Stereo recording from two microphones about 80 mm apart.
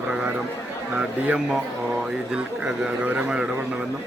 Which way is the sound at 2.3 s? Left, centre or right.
Centre.